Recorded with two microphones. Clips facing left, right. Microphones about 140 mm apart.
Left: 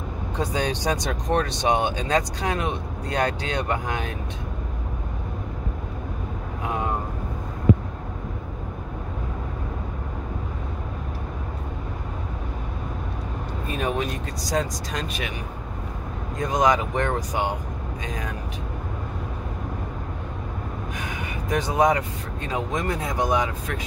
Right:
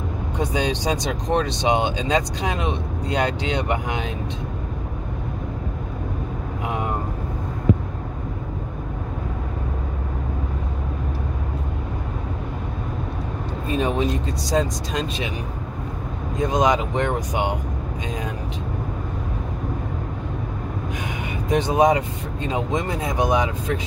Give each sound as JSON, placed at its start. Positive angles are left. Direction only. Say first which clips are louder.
{"t": 0.4, "sound": "speech", "louder": "right 2 dB", "side_deg": -15}
{"t": 13.7, "sound": "speech", "louder": "right 4 dB", "side_deg": -25}
{"t": 16.3, "sound": "speech", "louder": "right 2 dB", "side_deg": -20}
{"t": 21.5, "sound": "speech", "louder": "right 3 dB", "side_deg": -25}